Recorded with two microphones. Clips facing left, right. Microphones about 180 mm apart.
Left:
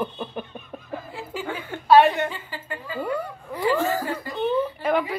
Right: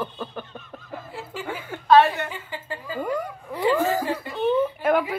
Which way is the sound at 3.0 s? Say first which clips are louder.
Even; 10° right (ahead or behind).